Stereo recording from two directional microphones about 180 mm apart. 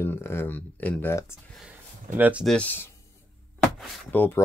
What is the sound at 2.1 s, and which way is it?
Speech, 10° right (ahead or behind).